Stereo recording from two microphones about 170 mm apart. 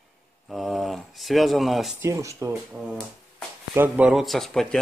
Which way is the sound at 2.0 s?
20° right (ahead or behind).